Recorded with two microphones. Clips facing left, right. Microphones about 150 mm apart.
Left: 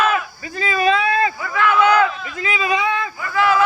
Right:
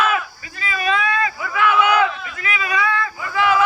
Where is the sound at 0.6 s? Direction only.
35° left (ahead or behind).